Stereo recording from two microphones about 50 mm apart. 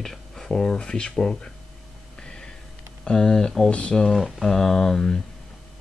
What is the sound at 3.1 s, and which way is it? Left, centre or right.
Speech, centre.